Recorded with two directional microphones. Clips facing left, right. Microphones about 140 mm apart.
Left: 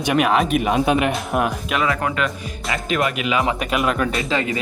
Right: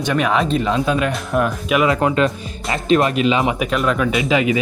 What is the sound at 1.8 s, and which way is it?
Speech, 25° right (ahead or behind).